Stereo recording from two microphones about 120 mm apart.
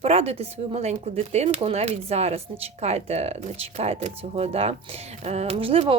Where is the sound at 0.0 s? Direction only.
60° right (ahead or behind).